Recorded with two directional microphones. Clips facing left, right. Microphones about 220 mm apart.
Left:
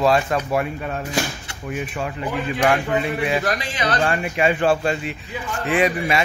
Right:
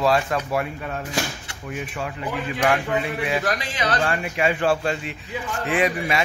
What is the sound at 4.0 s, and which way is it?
Speech, 25° left (ahead or behind).